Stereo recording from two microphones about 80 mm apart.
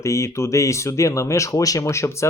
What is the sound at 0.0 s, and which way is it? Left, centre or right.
Speech, left.